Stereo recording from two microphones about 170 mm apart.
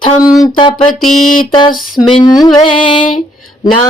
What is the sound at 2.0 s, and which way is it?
Speech, 25° left (ahead or behind).